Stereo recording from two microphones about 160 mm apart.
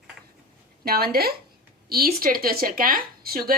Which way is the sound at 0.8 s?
75° right (ahead or behind).